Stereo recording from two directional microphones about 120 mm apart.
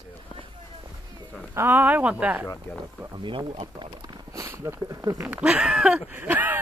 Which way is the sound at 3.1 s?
45° right (ahead or behind).